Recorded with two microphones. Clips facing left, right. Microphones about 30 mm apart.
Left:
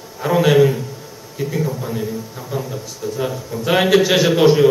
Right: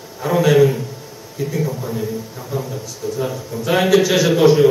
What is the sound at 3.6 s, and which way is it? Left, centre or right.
Speech, centre.